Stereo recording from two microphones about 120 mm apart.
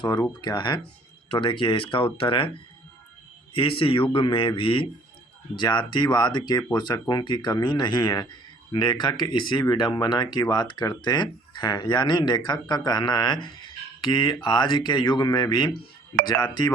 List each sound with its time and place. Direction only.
0.2 s a man's voice: 40° left (ahead or behind)
3.5 s a man's voice: 45° left (ahead or behind)